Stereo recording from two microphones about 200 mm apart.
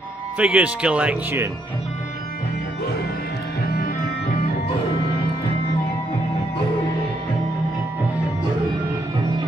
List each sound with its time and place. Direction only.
0.4 s speech: 5° right (ahead or behind)
3.6 s music: 50° left (ahead or behind)